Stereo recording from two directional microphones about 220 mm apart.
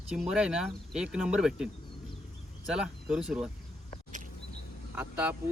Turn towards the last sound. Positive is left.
turn(degrees=-10)  # may be behind; listen again after turning